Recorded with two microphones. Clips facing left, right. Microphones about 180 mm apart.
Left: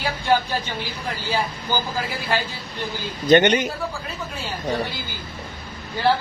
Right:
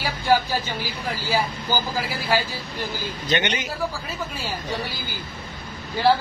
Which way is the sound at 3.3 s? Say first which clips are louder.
Left 10 dB; 45° left (ahead or behind).